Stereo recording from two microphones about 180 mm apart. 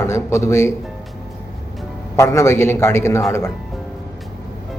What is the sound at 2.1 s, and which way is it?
A man's voice, 15° left (ahead or behind).